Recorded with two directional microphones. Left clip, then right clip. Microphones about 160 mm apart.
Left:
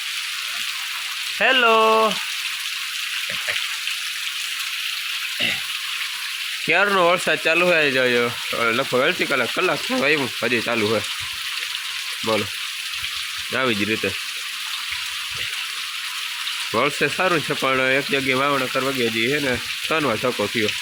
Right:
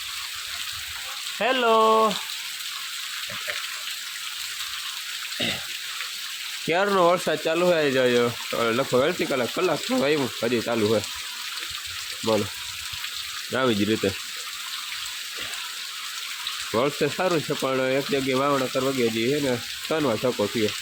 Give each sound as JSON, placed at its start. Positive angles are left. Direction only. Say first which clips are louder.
{"t": 1.4, "sound": "frying", "louder": "left 4 dB", "side_deg": 0}
{"t": 6.7, "sound": "speech", "louder": "left 3 dB", "side_deg": -10}
{"t": 7.9, "sound": "speech", "louder": "left 2 dB", "side_deg": -20}
{"t": 8.8, "sound": "frying", "louder": "left 3 dB", "side_deg": -5}
{"t": 13.5, "sound": "speech", "louder": "left 2 dB", "side_deg": -20}
{"t": 16.7, "sound": "frying", "louder": "left 3 dB", "side_deg": -5}